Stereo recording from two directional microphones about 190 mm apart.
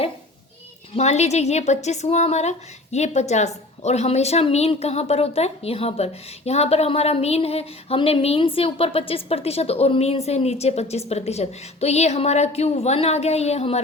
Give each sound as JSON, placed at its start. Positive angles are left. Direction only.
{"t": 0.9, "sound": "a woman's voice", "side_deg": 35}